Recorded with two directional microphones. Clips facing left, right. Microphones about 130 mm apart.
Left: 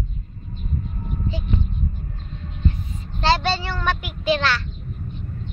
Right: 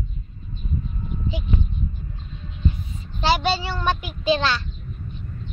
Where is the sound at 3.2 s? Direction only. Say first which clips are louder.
Left 1 dB; 10° right (ahead or behind).